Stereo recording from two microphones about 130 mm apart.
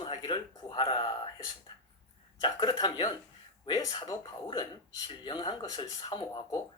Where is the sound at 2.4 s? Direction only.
30° left (ahead or behind).